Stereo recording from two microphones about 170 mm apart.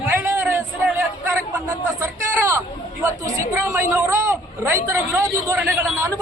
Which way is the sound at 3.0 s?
15° right (ahead or behind).